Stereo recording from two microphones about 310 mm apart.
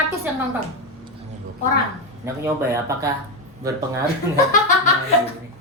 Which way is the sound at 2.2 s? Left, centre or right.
Centre.